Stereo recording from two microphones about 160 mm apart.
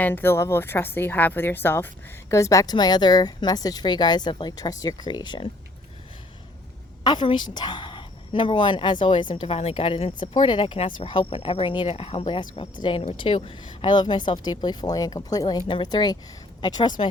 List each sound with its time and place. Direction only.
0.0 s a woman's voice: 15° left (ahead or behind); by 5.5 s 30° left (ahead or behind)
7.0 s a woman's voice: 30° left (ahead or behind)